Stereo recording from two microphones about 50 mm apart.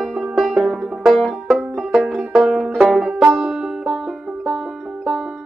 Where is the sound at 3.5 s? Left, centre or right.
Centre.